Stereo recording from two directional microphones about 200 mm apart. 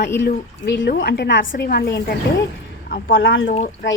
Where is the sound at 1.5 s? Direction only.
50° left (ahead or behind).